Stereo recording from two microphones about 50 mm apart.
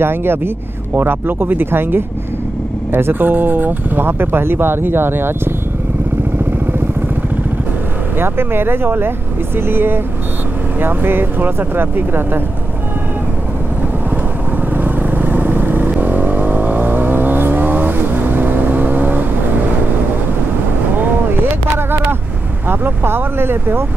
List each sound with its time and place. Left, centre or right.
0.0 s speech: right
8.2 s speech: right
14.9 s vehicle: right
21.0 s boat: right
22.7 s vehicle: right